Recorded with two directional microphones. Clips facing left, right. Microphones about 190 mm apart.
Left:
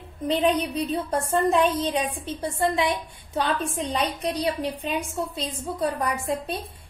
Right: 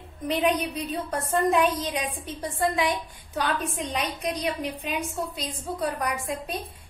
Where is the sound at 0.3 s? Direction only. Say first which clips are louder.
Left 2 dB; 30° left (ahead or behind).